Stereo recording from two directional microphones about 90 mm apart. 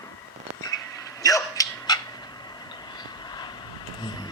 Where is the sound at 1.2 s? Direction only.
40° left (ahead or behind).